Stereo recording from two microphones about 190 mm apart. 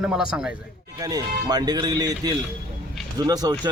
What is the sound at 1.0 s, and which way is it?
Speech, 20° right (ahead or behind).